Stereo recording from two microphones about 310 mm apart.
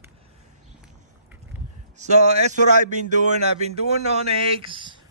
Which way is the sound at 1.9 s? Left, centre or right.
Right.